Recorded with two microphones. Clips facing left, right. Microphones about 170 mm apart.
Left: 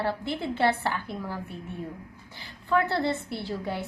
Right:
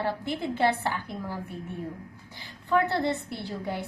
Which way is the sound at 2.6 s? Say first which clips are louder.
Even; 20° right (ahead or behind).